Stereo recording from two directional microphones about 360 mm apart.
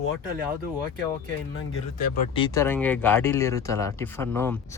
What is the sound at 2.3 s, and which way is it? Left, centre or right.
Speech, centre.